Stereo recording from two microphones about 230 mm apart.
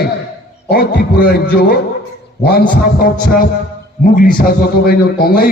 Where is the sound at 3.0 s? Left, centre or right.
Left.